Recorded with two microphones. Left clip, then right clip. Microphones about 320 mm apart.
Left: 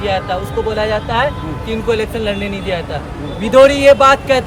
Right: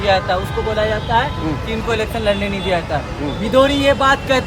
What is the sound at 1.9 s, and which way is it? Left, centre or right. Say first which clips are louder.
Speech: even; centre.